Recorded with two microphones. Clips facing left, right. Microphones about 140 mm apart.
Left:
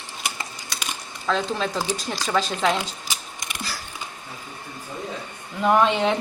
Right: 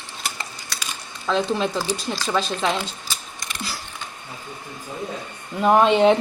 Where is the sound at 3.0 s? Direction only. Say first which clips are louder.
Even; 15° left (ahead or behind).